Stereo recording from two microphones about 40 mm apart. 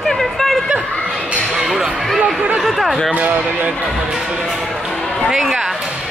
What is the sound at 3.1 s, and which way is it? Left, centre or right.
Speech, right.